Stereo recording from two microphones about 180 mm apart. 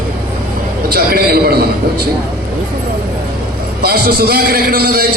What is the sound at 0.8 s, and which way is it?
A man's voice, 55° right (ahead or behind).